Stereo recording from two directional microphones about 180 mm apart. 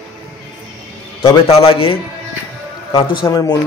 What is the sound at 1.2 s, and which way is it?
A man's voice, 30° left (ahead or behind).